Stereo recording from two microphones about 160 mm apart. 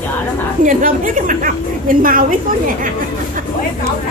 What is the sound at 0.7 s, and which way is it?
A woman's voice, 55° right (ahead or behind).